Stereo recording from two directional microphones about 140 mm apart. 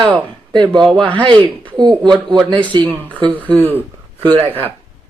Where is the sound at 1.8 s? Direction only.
30° right (ahead or behind).